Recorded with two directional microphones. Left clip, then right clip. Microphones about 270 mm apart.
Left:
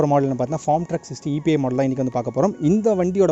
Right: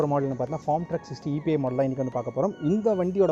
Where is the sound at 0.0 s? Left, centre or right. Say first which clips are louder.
Left 7 dB; left.